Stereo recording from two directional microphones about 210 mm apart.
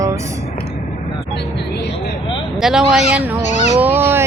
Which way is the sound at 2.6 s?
Centre (ahead or behind).